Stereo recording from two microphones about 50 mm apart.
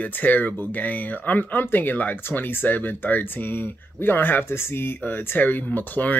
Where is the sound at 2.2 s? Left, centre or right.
Left.